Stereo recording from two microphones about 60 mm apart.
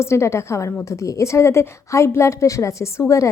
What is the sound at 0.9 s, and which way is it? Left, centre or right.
A woman's voice, left.